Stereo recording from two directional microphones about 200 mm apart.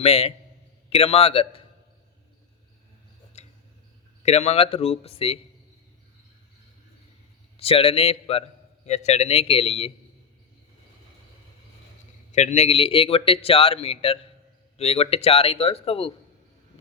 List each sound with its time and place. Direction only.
0.0 s a man's voice: 30° left (ahead or behind)
4.2 s a man's voice: 35° left (ahead or behind)
7.5 s a man's voice: 30° left (ahead or behind)
12.3 s a man's voice: 35° left (ahead or behind)